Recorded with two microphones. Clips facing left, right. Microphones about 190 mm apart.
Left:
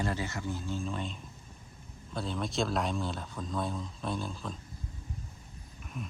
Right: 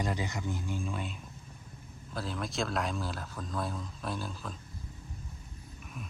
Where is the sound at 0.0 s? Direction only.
15° right (ahead or behind).